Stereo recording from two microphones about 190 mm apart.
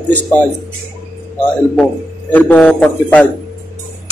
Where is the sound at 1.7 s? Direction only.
5° left (ahead or behind).